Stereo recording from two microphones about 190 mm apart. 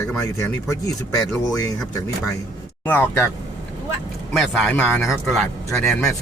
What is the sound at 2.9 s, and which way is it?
Speech, 10° left (ahead or behind).